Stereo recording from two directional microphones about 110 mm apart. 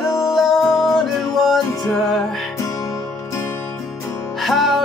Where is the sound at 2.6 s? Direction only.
30° left (ahead or behind).